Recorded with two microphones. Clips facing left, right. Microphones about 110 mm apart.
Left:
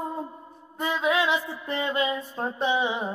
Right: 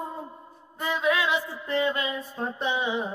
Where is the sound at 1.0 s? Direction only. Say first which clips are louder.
Left 1 dB; 20° left (ahead or behind).